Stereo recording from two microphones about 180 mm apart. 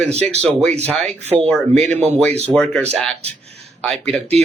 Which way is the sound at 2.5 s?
5° left (ahead or behind).